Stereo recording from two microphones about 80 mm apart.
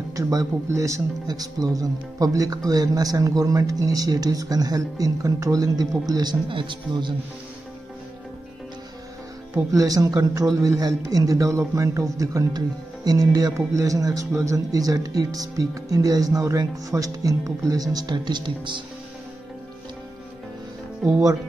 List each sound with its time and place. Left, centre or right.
0.1 s a man's voice: right
1.2 s speech: right
9.7 s speech: right